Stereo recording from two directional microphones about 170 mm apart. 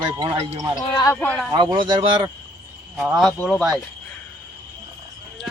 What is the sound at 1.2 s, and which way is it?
Speech, 5° left (ahead or behind).